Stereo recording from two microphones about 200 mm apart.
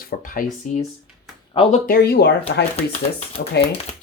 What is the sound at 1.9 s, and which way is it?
Speech, 50° left (ahead or behind).